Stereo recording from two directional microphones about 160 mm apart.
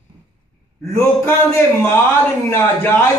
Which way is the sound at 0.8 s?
15° left (ahead or behind).